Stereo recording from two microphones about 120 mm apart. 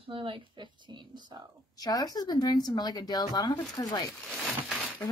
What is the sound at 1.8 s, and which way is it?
Speech, 30° left (ahead or behind).